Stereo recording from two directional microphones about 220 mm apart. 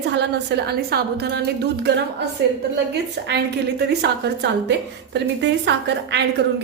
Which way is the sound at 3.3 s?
50° right (ahead or behind).